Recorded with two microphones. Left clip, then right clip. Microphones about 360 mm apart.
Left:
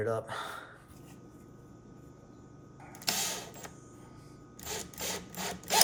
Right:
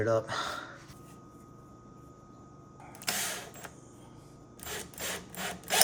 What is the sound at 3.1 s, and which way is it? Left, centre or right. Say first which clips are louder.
Mechanisms: left 1 dB; centre.